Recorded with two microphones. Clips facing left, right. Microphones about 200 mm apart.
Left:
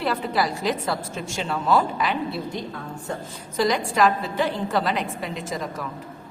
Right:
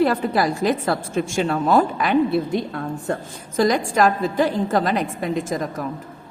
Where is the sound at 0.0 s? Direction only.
50° right (ahead or behind).